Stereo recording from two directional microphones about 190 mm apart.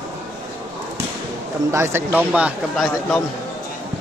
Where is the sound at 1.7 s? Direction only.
15° right (ahead or behind).